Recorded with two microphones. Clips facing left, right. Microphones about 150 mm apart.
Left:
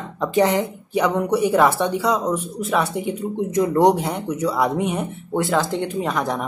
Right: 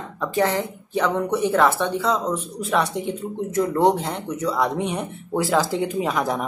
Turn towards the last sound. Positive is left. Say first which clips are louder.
# even
turn(degrees=0)  # may be behind; listen again after turning